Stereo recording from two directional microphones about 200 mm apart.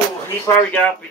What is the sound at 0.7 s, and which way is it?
Speech, 5° left (ahead or behind).